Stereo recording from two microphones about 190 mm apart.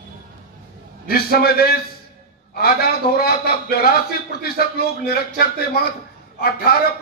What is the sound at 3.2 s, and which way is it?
Speech, 55° left (ahead or behind).